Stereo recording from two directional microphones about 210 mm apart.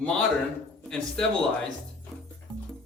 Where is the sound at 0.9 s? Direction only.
5° left (ahead or behind).